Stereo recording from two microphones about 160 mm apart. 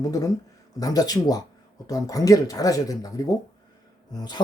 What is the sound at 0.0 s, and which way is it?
Speech, 20° left (ahead or behind).